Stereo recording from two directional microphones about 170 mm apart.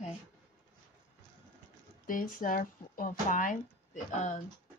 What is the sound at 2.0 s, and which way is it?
Speech, 55° left (ahead or behind).